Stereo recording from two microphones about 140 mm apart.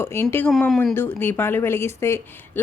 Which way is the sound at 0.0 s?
15° left (ahead or behind).